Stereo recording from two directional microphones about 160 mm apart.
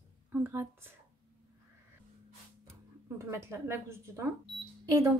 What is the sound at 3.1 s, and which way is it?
A woman's voice, 15° right (ahead or behind).